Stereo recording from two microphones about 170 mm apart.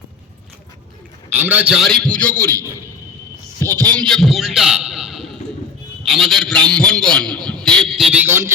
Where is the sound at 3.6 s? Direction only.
20° right (ahead or behind).